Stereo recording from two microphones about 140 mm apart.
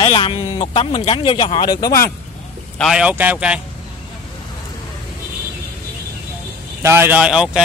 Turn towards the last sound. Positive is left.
turn(degrees=-5)  # may be behind; listen again after turning